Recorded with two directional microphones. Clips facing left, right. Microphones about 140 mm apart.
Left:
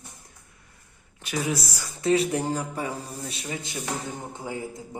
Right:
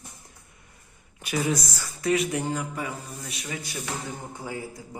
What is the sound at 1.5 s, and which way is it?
Speech, 15° left (ahead or behind).